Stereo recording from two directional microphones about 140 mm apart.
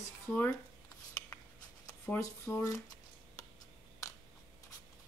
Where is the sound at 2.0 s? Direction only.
15° left (ahead or behind).